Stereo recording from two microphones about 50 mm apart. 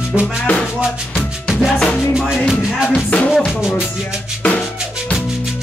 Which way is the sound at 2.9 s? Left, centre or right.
Left.